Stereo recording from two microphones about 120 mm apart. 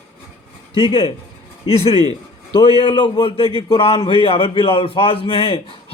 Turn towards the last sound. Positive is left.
turn(degrees=50)  # may be behind; listen again after turning